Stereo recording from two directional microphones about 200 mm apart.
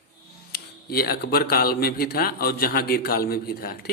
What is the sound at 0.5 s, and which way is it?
A man's voice, 50° left (ahead or behind).